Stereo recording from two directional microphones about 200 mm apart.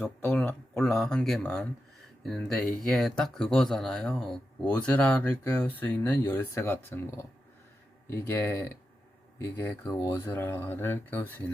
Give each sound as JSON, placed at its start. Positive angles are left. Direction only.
{"t": 0.0, "sound": "speech", "side_deg": 5}